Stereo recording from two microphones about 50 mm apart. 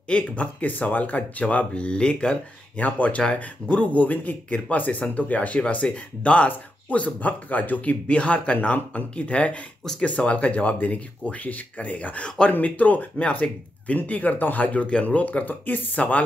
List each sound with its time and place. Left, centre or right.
0.1 s speech: left